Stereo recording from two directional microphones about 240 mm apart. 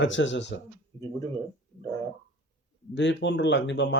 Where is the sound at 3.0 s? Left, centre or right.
Left.